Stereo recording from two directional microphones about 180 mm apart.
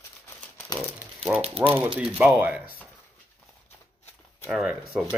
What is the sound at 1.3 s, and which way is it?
Speech, 35° right (ahead or behind).